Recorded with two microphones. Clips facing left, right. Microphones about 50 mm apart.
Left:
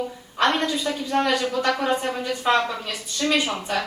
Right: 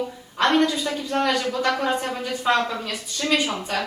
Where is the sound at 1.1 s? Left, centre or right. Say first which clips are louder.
Left 1 dB; centre.